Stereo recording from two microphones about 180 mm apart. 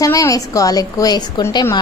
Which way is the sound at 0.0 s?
20° left (ahead or behind).